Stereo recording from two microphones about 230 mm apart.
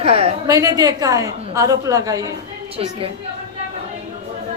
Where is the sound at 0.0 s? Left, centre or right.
Right.